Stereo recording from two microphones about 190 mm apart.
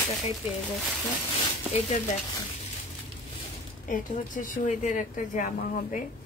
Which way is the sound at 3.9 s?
45° left (ahead or behind).